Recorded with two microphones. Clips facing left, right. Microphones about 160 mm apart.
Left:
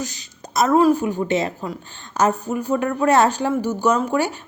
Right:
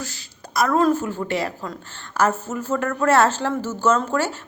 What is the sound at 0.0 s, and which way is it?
A woman's voice, 20° left (ahead or behind).